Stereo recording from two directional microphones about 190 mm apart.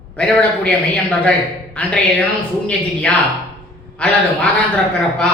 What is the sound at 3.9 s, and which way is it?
Speech, 5° left (ahead or behind).